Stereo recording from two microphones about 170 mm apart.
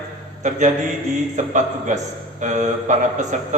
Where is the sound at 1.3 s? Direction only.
45° right (ahead or behind).